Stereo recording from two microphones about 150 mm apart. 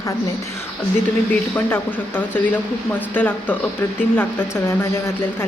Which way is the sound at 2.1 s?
10° left (ahead or behind).